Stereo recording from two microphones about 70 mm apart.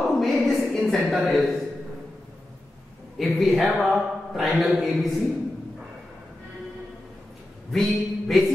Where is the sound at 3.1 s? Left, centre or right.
Centre.